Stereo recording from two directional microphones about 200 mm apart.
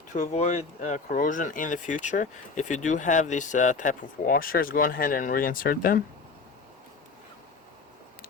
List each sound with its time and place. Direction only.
0.1 s speech: 35° left (ahead or behind)